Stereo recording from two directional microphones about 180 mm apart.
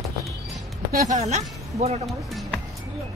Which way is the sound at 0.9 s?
40° right (ahead or behind).